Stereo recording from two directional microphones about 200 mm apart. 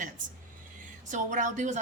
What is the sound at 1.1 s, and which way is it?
Speech, 40° right (ahead or behind).